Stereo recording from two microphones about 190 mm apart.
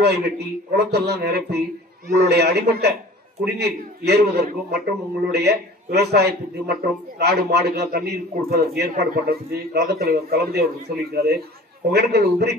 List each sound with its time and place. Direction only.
0.0 s a man's voice: 60° right (ahead or behind)